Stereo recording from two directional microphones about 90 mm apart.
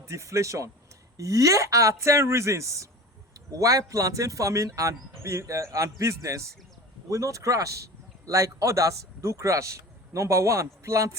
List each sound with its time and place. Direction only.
0.0 s a man's voice: 35° right (ahead or behind)